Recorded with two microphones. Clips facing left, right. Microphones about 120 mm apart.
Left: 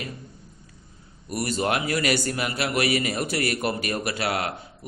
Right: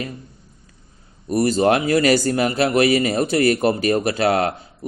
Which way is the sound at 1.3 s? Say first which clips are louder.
Right 9 dB; 30° right (ahead or behind).